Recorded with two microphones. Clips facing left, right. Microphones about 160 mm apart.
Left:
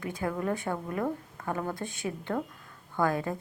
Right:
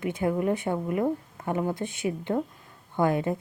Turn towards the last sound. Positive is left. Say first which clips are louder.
# right 4 dB
turn(degrees=-20)  # may be behind; listen again after turning